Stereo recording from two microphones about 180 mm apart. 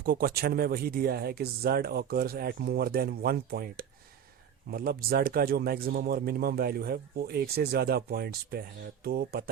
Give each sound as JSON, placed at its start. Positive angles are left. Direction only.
{"t": 0.0, "sound": "a man's voice", "side_deg": -55}